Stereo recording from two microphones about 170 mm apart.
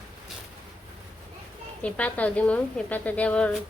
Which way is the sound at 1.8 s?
10° left (ahead or behind).